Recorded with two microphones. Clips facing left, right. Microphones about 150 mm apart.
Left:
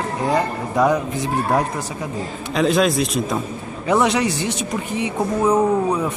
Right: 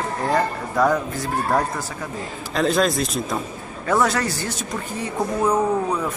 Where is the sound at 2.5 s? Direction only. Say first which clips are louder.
Left 2 dB; centre (ahead or behind).